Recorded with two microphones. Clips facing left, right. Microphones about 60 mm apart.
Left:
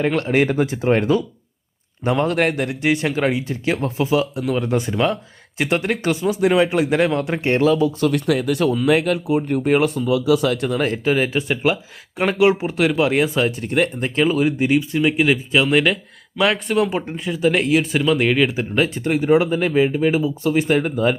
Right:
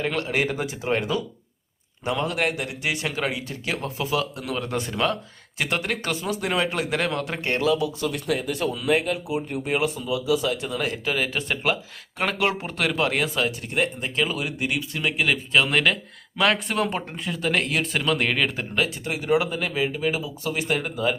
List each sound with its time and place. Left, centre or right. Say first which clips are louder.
0.3 s speech: left 8 dB; left
2.0 s a man's voice: left 6 dB; left
3.2 s speech: left 8 dB; left
7.6 s a man's voice: left 5 dB; left
8.0 s speech: left 7 dB; left
8.9 s speech: left 4 dB; left
9.3 s speech: left 10 dB; left
10.2 s speech: left 4 dB; left
10.8 s speech: left 7 dB; left
11.3 s speech: left 5 dB; centre; by 14.8 s left
14.8 s speech: left 8 dB; centre
19.2 s speech: left 6 dB; left